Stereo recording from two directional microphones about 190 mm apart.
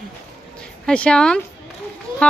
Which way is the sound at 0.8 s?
5° left (ahead or behind).